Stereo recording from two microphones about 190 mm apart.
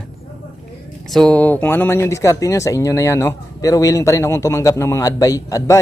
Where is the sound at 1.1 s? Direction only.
5° left (ahead or behind).